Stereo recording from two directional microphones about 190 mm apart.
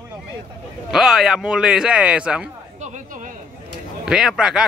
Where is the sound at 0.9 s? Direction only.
Centre (ahead or behind).